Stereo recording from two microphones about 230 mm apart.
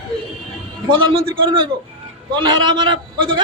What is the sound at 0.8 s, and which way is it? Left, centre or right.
A man's voice, right.